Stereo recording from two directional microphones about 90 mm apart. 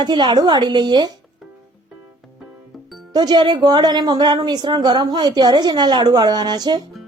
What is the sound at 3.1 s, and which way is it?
Speech, 55° right (ahead or behind).